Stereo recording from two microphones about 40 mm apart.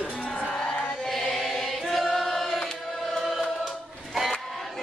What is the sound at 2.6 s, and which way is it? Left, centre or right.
Music, centre.